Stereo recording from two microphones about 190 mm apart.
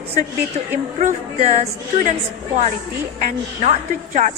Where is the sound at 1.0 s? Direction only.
40° right (ahead or behind).